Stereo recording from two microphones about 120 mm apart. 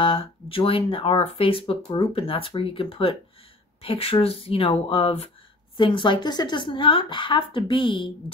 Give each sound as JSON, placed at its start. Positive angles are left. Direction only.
{"t": 0.0, "sound": "speech", "side_deg": 45}